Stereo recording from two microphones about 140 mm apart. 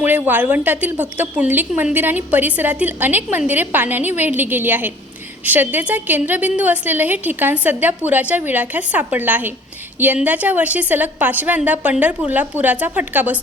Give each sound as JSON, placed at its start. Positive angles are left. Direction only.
{"t": 0.0, "sound": "a woman's voice", "side_deg": -15}